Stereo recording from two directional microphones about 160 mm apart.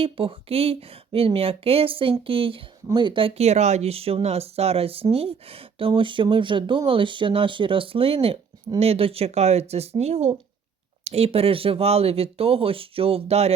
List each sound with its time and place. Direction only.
0.0 s speech: 35° right (ahead or behind)